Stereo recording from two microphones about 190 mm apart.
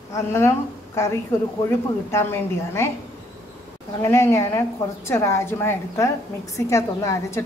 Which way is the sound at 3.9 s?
15° left (ahead or behind).